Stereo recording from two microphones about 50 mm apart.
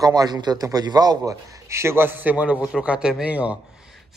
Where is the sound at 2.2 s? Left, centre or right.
Right.